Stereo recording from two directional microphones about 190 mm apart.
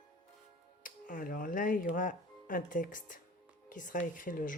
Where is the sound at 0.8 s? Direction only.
45° left (ahead or behind).